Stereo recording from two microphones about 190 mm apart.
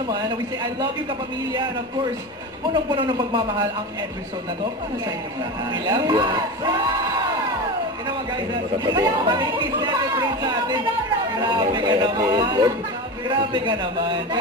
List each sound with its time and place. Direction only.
2.7 s speech: 25° right (ahead or behind)
5.7 s speech: 25° right (ahead or behind)
8.3 s speech: 20° right (ahead or behind)